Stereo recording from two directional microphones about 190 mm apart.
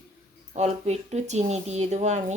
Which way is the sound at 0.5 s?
35° right (ahead or behind).